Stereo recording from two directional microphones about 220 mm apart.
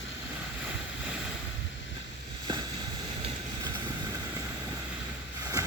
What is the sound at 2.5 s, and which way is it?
Boat, 20° right (ahead or behind).